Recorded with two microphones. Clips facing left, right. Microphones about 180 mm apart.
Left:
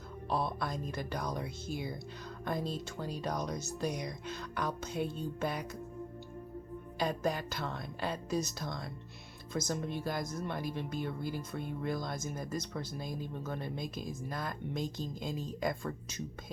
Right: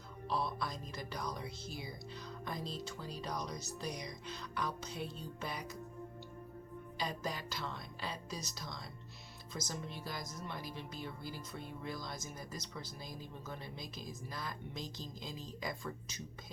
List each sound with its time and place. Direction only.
0.3 s speech: 55° left (ahead or behind)
7.0 s speech: 50° left (ahead or behind)